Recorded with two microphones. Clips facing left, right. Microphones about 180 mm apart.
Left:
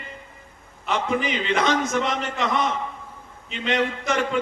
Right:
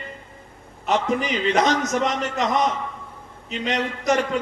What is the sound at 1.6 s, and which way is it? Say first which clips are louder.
Speech: right 2 dB; 40° right (ahead or behind).